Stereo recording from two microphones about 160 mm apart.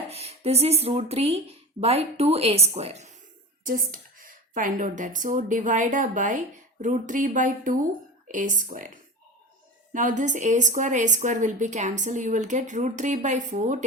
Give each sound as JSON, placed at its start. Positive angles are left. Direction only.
{"t": 0.1, "sound": "speech", "side_deg": -40}
{"t": 3.7, "sound": "a woman's voice", "side_deg": -60}
{"t": 9.9, "sound": "a woman's voice", "side_deg": -55}